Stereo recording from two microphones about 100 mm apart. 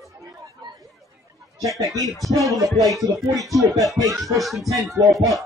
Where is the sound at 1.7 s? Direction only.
35° right (ahead or behind).